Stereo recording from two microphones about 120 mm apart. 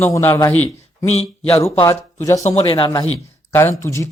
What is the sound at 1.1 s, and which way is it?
Speech, 60° left (ahead or behind).